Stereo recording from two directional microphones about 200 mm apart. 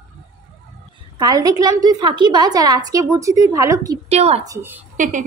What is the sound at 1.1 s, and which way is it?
A woman's voice, 20° right (ahead or behind).